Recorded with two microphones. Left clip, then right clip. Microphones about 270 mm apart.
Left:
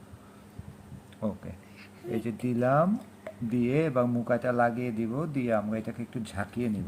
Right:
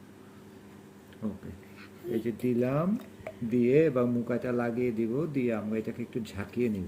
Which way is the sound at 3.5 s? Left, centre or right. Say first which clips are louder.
Right 3 dB; left.